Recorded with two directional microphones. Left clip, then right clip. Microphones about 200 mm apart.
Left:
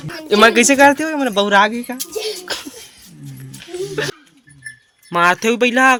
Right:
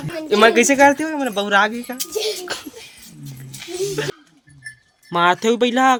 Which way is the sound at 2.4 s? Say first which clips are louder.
Left 3 dB; 10° left (ahead or behind).